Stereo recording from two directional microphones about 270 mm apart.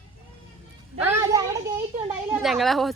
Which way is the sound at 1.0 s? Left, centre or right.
Centre.